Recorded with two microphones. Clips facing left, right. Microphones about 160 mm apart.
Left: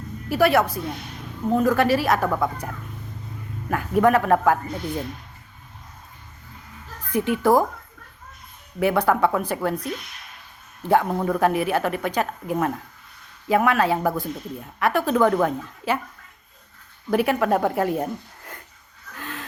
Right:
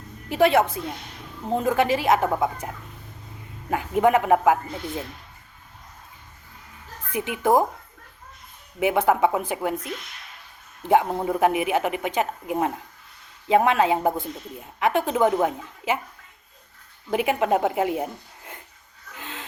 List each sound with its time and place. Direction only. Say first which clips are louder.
0.3 s a woman's voice: even; 20° right (ahead or behind)
7.1 s a woman's voice: left 2 dB; 15° right (ahead or behind)
8.8 s a woman's voice: even; 15° right (ahead or behind)
10.8 s a woman's voice: even; 20° right (ahead or behind)
17.1 s a woman's voice: left 2 dB; 20° right (ahead or behind)
19.1 s wheeze: left 3 dB; 20° right (ahead or behind)